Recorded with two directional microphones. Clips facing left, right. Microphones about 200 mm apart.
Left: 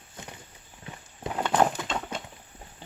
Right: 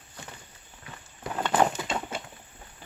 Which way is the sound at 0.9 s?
25° left (ahead or behind).